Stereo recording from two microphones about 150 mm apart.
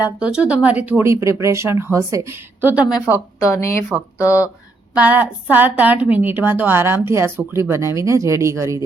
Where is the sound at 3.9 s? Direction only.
10° right (ahead or behind).